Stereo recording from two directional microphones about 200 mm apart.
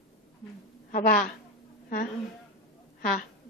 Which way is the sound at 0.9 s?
40° left (ahead or behind).